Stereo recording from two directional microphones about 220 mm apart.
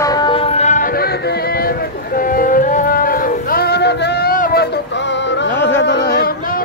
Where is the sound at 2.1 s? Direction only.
40° left (ahead or behind).